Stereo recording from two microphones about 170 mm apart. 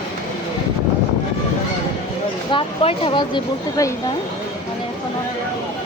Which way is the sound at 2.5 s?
30° left (ahead or behind).